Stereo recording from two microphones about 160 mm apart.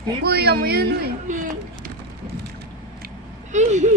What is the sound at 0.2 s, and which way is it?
Speech, 85° right.